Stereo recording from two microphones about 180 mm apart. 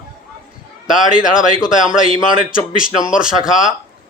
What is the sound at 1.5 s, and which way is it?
Speech, 45° left (ahead or behind).